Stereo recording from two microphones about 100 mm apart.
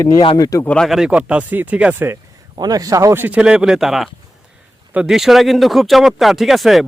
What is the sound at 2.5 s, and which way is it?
Speech, 40° right (ahead or behind).